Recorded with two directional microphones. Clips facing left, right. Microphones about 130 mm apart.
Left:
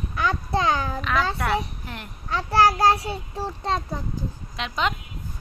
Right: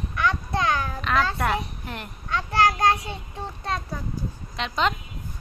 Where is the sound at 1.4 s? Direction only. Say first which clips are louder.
Left 1 dB; centre (ahead or behind).